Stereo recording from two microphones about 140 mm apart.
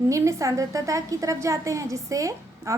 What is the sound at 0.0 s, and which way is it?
A woman's voice, 20° right (ahead or behind).